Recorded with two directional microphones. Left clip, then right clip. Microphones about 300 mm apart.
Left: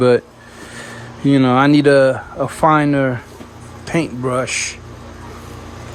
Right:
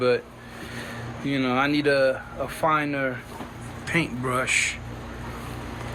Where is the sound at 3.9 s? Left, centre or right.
Centre.